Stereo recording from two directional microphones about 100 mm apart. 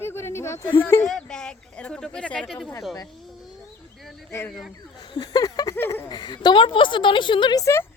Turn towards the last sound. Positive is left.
turn(degrees=30)  # may be behind; listen again after turning